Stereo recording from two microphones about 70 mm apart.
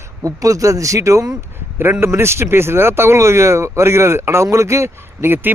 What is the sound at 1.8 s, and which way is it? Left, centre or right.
Speech, right.